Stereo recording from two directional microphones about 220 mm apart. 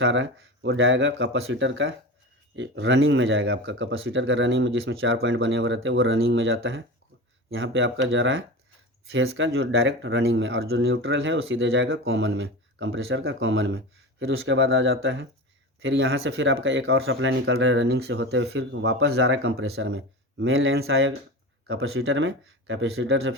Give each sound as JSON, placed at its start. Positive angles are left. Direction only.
{"t": 0.0, "sound": "speech", "side_deg": -55}
{"t": 21.7, "sound": "speech", "side_deg": -65}